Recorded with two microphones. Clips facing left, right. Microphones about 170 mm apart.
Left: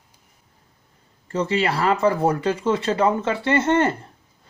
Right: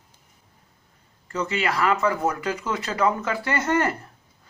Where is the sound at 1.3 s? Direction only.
30° left (ahead or behind).